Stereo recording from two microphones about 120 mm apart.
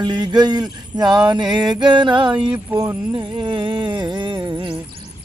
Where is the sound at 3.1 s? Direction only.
40° right (ahead or behind).